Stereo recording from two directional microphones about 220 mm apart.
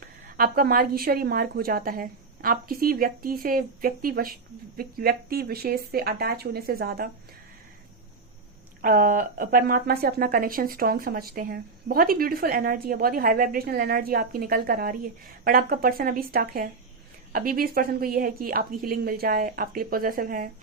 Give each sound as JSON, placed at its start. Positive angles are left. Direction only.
{"t": 0.3, "sound": "speech", "side_deg": -45}
{"t": 8.8, "sound": "speech", "side_deg": -40}